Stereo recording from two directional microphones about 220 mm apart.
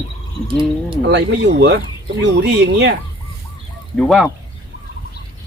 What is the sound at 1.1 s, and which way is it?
Speech, 50° right (ahead or behind).